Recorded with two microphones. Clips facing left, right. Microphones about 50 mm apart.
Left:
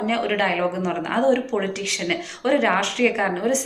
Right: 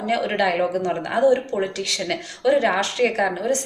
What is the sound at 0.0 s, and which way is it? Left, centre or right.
A woman's voice, left.